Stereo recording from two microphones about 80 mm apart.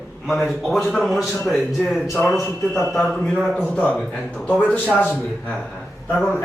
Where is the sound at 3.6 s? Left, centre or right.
Centre.